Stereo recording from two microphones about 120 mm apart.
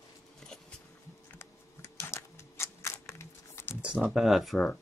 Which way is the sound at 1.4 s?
20° left (ahead or behind).